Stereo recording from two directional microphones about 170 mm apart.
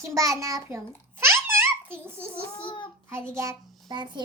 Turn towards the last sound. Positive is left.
turn(degrees=-25)  # may be behind; listen again after turning